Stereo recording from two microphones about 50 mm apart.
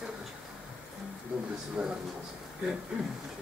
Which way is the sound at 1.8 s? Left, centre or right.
Right.